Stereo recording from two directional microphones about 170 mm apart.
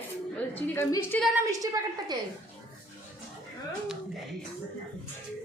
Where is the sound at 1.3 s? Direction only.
20° right (ahead or behind).